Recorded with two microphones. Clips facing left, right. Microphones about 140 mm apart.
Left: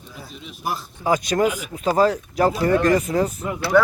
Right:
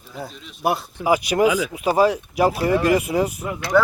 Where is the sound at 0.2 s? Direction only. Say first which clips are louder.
Right 8 dB; 60° right (ahead or behind).